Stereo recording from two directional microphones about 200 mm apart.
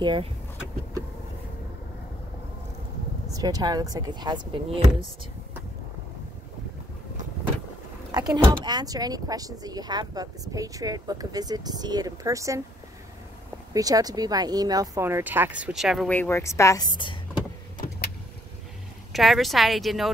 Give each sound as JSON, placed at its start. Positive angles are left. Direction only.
{"t": 0.0, "sound": "speech", "side_deg": -25}
{"t": 3.3, "sound": "speech", "side_deg": -20}
{"t": 8.1, "sound": "speech", "side_deg": -20}
{"t": 13.7, "sound": "speech", "side_deg": -20}
{"t": 19.1, "sound": "speech", "side_deg": 0}